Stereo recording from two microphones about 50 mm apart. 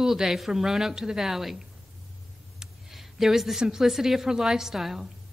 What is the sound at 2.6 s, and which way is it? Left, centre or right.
Speech, centre.